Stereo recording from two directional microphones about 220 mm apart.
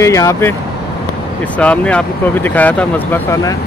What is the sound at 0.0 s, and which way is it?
Speech, 15° left (ahead or behind).